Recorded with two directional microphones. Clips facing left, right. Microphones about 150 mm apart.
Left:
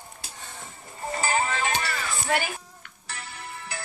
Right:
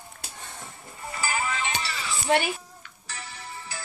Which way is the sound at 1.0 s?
35° left (ahead or behind).